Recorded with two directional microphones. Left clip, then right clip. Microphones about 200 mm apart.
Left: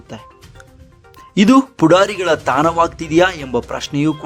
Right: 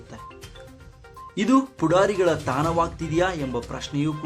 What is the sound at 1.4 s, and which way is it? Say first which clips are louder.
Speech: left 9 dB; 50° left (ahead or behind).